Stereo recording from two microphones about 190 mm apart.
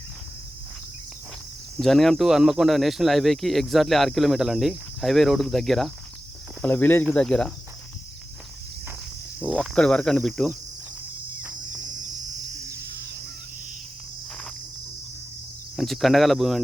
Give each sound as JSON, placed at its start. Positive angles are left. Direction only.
{"t": 1.8, "sound": "speech", "side_deg": 0}
{"t": 9.4, "sound": "speech", "side_deg": 0}
{"t": 12.8, "sound": "bird", "side_deg": -55}
{"t": 15.7, "sound": "speech", "side_deg": 0}